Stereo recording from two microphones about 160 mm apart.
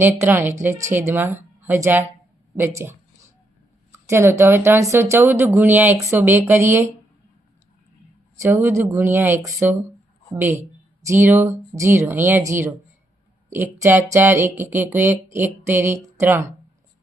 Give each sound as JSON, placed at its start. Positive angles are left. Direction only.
{"t": 0.0, "sound": "speech", "side_deg": -15}
{"t": 3.9, "sound": "speech", "side_deg": -15}
{"t": 8.4, "sound": "speech", "side_deg": -15}
{"t": 11.0, "sound": "speech", "side_deg": -15}